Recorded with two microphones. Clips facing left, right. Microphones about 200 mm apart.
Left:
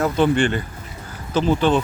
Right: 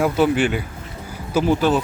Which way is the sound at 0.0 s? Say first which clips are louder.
Even; 5° right (ahead or behind).